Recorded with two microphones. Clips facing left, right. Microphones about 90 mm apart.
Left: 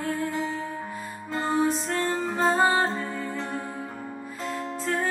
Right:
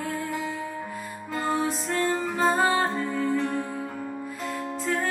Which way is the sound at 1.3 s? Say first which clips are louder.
Left 1 dB; 30° left (ahead or behind).